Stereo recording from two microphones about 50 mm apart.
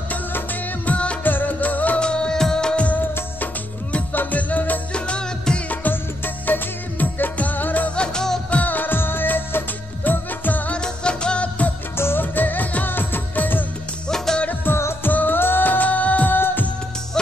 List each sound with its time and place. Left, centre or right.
0.8 s music of bollywood: left
1.2 s music: left
2.0 s music: centre
3.9 s music: left; by 5.6 s centre
5.7 s music of bollywood: left
7.9 s music: centre
8.5 s music: left
10.7 s music: centre
12.0 s music: left
14.0 s music: centre
15.0 s music of bollywood: left